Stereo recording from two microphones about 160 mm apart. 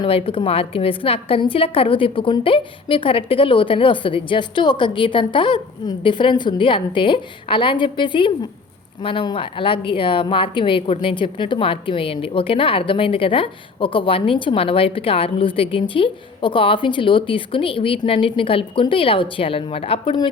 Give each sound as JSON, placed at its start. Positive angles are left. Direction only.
{"t": 0.0, "sound": "a woman's voice", "side_deg": 35}